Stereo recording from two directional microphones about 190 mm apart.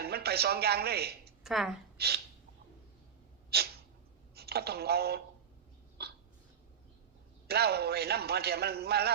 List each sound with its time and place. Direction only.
0.0 s a man's voice: 55° right (ahead or behind)
1.5 s a woman's voice: centre (ahead or behind)
2.0 s speech: 55° right (ahead or behind)
3.5 s sneeze: 55° right (ahead or behind)
4.4 s speech: 55° right (ahead or behind)
6.0 s a sound: 60° right (ahead or behind)
7.4 s a man's voice: 55° right (ahead or behind)